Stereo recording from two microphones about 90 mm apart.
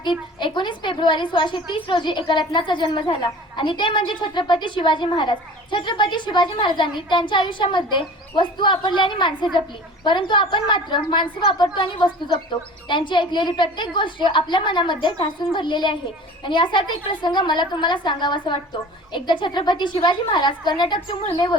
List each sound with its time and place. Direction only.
0.0 s a woman's voice: 60° left (ahead or behind)